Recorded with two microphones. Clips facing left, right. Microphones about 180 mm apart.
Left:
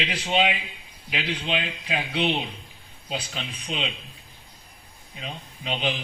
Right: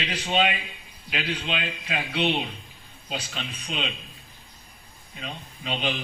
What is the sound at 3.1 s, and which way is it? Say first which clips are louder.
Speech: left 1 dB; 10° left (ahead or behind).